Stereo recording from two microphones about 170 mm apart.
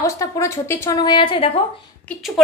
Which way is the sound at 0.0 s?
15° left (ahead or behind).